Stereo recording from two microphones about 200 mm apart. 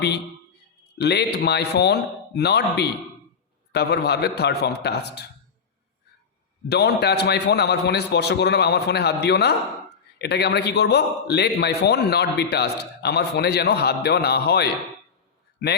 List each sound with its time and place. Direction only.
0.9 s a man's voice: 55° left (ahead or behind)
6.7 s a man's voice: 55° left (ahead or behind)